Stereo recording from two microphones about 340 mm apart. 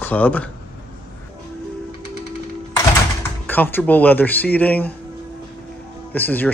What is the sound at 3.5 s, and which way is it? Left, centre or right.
Speech, centre.